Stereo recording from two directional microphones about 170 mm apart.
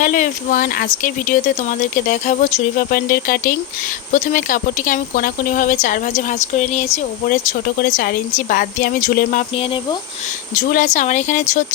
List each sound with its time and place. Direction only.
0.0 s speech: 50° left (ahead or behind)
10.5 s speech: 55° left (ahead or behind)